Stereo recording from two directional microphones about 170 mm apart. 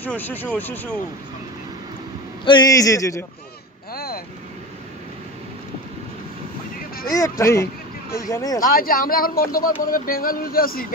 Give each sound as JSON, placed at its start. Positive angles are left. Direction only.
{"t": 0.0, "sound": "speech", "side_deg": 10}
{"t": 2.4, "sound": "a man's voice", "side_deg": 25}
{"t": 3.9, "sound": "vehicle", "side_deg": 65}
{"t": 7.1, "sound": "a man's voice", "side_deg": 20}
{"t": 8.6, "sound": "speech", "side_deg": 55}